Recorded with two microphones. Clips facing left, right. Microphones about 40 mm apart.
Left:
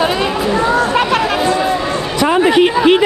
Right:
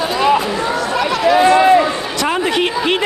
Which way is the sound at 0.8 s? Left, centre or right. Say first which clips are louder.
Left 3 dB; left.